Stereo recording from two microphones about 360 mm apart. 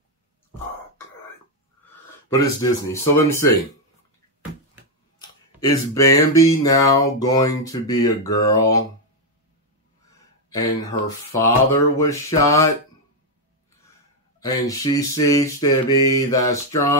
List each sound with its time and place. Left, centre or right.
2.2 s speech: centre
5.2 s a sound: centre
5.6 s speech: centre
10.5 s speech: centre
14.4 s speech: centre